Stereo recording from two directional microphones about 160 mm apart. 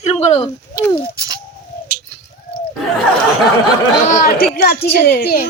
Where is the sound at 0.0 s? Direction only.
40° left (ahead or behind).